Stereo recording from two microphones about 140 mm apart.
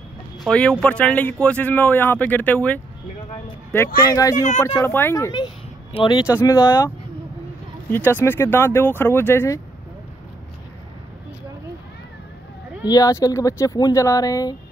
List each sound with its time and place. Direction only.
0.4 s speech: 5° left (ahead or behind); by 6.2 s 30° left (ahead or behind)
6.2 s speech: 20° left (ahead or behind)
7.9 s speech: 15° left (ahead or behind)
12.8 s speech: 25° left (ahead or behind)